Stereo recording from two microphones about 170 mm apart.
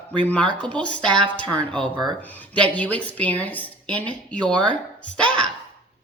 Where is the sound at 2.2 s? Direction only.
10° left (ahead or behind).